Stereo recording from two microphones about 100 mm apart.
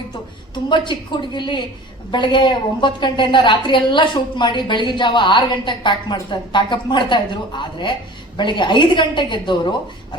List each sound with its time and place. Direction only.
0.7 s a woman's voice: 50° left (ahead or behind)